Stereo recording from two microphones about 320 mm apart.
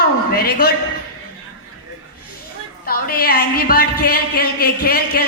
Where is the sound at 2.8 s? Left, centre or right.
Left.